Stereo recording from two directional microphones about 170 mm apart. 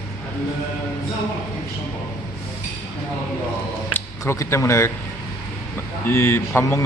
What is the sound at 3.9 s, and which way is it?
Speech, 15° left (ahead or behind).